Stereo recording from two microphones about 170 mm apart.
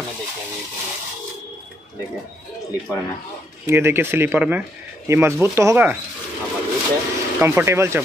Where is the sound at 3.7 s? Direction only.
15° right (ahead or behind).